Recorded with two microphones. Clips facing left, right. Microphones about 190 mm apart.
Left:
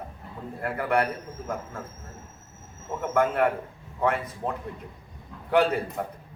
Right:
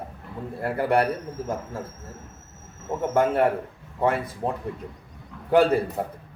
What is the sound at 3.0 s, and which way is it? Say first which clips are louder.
A man's voice: right 2 dB; 30° right (ahead or behind).